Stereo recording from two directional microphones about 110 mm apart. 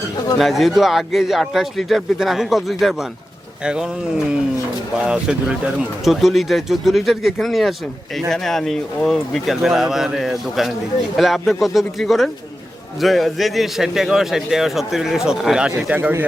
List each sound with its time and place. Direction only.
0.3 s a man's voice: centre (ahead or behind)
5.0 s a man's voice: 10° right (ahead or behind)
16.0 s speech: 25° right (ahead or behind)